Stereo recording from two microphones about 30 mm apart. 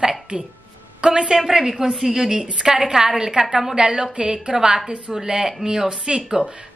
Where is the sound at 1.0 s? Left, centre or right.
Right.